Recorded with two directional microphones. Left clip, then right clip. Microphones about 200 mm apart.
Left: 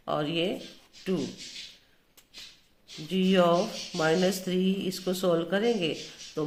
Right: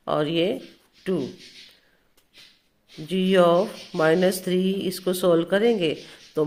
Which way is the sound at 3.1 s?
45° right (ahead or behind).